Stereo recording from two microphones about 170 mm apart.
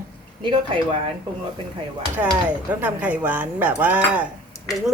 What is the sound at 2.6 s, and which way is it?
A man's voice, 10° right (ahead or behind).